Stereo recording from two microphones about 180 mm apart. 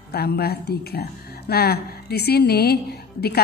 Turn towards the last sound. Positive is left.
turn(degrees=60)  # may be behind; listen again after turning